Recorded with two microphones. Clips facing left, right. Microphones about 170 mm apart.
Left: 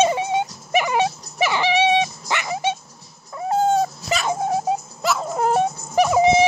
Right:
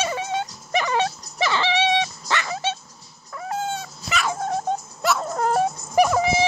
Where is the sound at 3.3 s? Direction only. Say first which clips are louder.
Left 9 dB; 30° left (ahead or behind).